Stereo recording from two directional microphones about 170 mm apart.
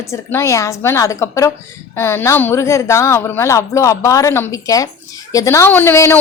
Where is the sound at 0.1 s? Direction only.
15° left (ahead or behind).